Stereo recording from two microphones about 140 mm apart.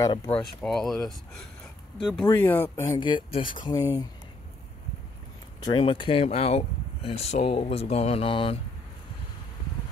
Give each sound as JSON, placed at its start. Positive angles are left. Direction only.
{"t": 0.0, "sound": "speech", "side_deg": 25}
{"t": 0.6, "sound": "speech", "side_deg": 5}
{"t": 2.2, "sound": "speech", "side_deg": 15}
{"t": 3.0, "sound": "speech", "side_deg": 35}
{"t": 5.6, "sound": "speech", "side_deg": 35}